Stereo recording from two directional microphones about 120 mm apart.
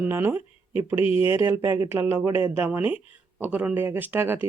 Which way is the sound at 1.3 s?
20° right (ahead or behind).